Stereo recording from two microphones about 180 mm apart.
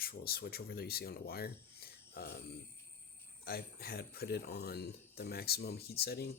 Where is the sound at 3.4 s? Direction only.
60° left (ahead or behind).